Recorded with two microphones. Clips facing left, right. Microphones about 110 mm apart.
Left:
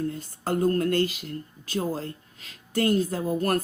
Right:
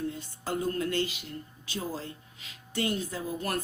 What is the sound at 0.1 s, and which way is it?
Speech, 45° left (ahead or behind).